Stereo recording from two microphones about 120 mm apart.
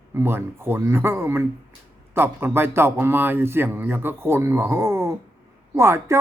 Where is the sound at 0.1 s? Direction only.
20° right (ahead or behind).